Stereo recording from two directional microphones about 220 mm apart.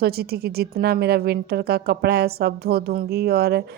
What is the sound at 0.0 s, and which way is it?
Speech, 45° right (ahead or behind).